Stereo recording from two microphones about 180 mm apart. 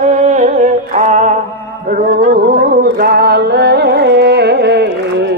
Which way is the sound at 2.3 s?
60° right (ahead or behind).